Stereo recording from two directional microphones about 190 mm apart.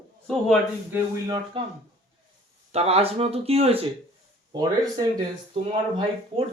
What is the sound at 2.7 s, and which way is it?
Speech, 35° right (ahead or behind).